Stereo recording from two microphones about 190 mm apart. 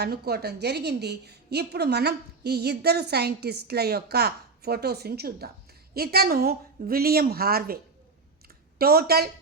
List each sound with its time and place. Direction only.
0.0 s a woman's voice: 55° right (ahead or behind)
8.8 s a woman's voice: 55° right (ahead or behind)